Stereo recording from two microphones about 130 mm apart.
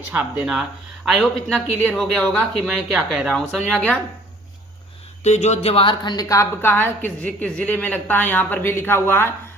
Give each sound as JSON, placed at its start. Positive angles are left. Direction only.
{"t": 0.1, "sound": "speech", "side_deg": -15}
{"t": 5.2, "sound": "a woman's voice", "side_deg": 60}